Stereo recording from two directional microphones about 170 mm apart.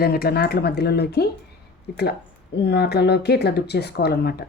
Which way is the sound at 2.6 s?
75° left (ahead or behind).